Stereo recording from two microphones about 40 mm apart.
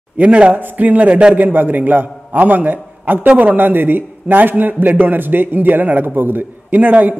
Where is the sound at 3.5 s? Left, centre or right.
Right.